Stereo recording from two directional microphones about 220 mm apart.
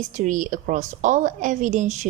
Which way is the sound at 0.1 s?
35° right (ahead or behind).